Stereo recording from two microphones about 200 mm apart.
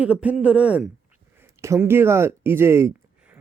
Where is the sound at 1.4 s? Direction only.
15° right (ahead or behind).